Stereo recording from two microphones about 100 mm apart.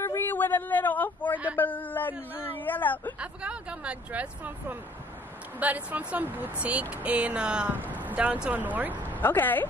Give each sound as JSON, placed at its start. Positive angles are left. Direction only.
{"t": 0.0, "sound": "a woman's voice", "side_deg": 20}
{"t": 3.2, "sound": "speech", "side_deg": -10}
{"t": 9.1, "sound": "speech", "side_deg": 20}